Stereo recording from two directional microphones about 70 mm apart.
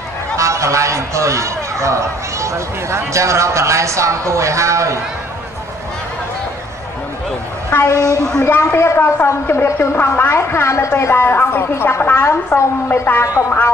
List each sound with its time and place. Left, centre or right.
0.4 s speech: right
7.7 s a woman's voice: left